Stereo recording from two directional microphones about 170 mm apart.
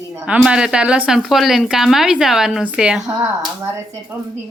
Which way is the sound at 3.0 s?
20° right (ahead or behind).